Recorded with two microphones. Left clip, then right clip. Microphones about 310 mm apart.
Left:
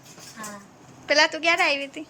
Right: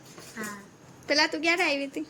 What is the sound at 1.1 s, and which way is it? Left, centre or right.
Speech, centre.